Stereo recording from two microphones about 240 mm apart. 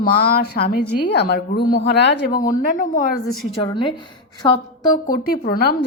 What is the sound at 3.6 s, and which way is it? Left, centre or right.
A woman's voice, centre.